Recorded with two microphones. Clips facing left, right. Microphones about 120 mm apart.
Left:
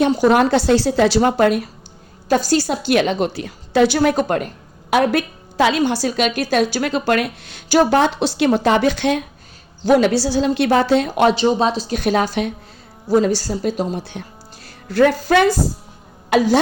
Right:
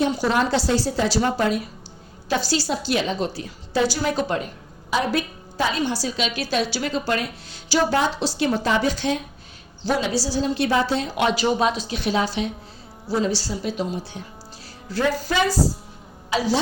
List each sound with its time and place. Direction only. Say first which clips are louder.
0.2 s a woman's voice: left 7 dB; 55° left (ahead or behind)
2.3 s a woman's voice: left 6 dB; 50° left (ahead or behind)
4.9 s a woman's voice: left 6 dB; 65° left (ahead or behind)
9.8 s a woman's voice: left 9 dB; 60° left (ahead or behind)
11.3 s speech: left 4 dB; 25° left (ahead or behind)
11.9 s a woman's voice: left 5 dB; 50° left (ahead or behind)
14.8 s a woman's voice: left 8 dB; 60° left (ahead or behind)